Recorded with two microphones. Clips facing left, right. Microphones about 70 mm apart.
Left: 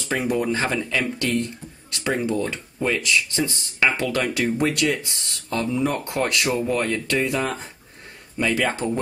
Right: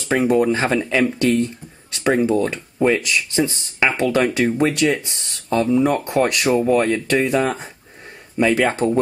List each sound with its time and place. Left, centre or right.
0.1 s speech: right
5.9 s speech: right
8.4 s speech: right